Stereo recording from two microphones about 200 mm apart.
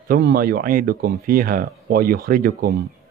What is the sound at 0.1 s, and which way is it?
Speech, 45° right (ahead or behind).